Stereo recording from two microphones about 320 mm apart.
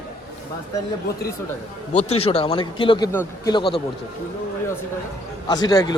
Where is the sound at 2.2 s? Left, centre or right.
Centre.